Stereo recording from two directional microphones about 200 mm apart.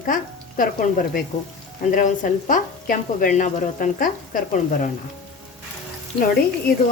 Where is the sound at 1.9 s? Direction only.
40° left (ahead or behind).